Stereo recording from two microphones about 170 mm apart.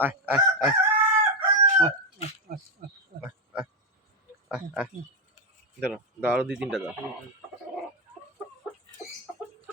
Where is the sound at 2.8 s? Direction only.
60° right (ahead or behind).